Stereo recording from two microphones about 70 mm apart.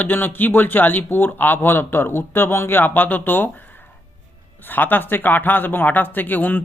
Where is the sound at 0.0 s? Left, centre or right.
Left.